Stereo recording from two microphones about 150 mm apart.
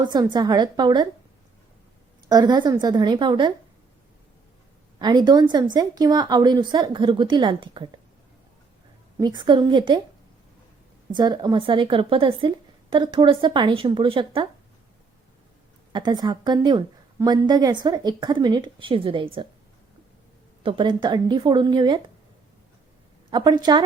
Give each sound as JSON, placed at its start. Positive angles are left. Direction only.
{"t": 0.0, "sound": "a woman's voice", "side_deg": -30}
{"t": 2.3, "sound": "a woman's voice", "side_deg": -30}
{"t": 4.9, "sound": "a woman's voice", "side_deg": -30}
{"t": 9.1, "sound": "speech", "side_deg": -30}
{"t": 11.1, "sound": "speech", "side_deg": -30}
{"t": 15.9, "sound": "a woman's voice", "side_deg": -30}
{"t": 20.7, "sound": "a woman's voice", "side_deg": -35}
{"t": 23.3, "sound": "a woman's voice", "side_deg": -25}